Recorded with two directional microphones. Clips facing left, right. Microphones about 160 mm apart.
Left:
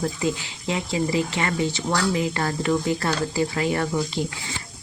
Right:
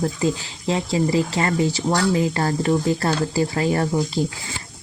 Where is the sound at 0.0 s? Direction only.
35° right (ahead or behind).